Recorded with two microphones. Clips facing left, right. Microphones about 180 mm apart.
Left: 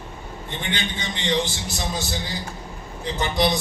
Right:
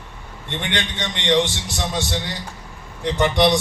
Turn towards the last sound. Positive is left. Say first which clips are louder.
# right 5 dB
turn(degrees=-75)  # may be behind; listen again after turning